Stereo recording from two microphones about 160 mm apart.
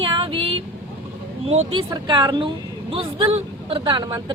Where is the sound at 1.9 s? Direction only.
25° right (ahead or behind).